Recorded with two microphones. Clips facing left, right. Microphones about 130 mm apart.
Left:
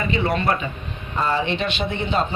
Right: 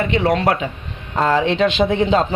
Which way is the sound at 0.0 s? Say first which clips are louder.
Right 5 dB; 80° right.